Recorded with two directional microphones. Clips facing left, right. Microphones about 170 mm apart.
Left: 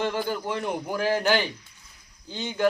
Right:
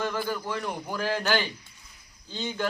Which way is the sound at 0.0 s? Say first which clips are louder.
Left 3 dB; 25° left (ahead or behind).